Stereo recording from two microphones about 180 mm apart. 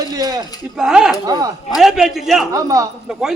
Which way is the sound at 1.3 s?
20° right (ahead or behind).